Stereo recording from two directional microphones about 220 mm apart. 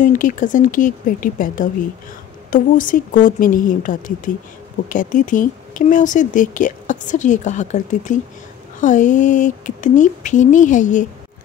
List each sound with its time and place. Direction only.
0.0 s speech: 35° left (ahead or behind)